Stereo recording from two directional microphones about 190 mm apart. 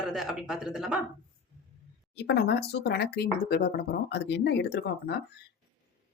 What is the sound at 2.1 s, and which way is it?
A woman's voice, 65° left (ahead or behind).